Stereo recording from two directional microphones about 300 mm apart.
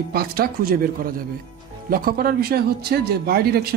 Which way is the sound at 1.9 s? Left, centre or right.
Right.